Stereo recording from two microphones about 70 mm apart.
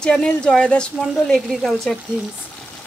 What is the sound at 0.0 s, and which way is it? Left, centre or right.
Speech, centre.